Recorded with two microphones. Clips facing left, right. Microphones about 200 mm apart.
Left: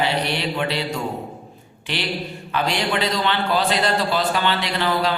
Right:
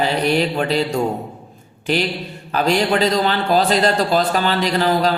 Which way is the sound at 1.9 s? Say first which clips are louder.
Right 6 dB; 40° right (ahead or behind).